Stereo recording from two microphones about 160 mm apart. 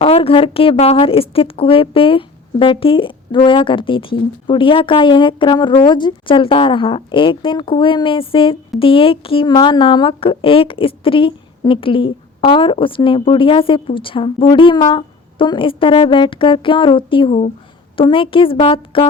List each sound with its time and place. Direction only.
0.0 s a woman's voice: 35° left (ahead or behind)